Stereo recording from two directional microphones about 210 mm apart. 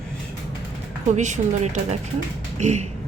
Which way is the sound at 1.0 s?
35° right (ahead or behind).